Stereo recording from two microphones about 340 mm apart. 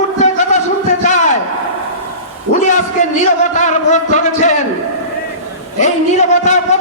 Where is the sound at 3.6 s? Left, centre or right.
Left.